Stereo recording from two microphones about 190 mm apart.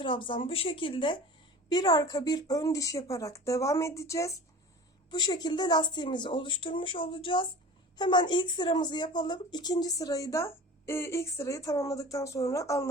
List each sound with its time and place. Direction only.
0.0 s speech: 25° left (ahead or behind)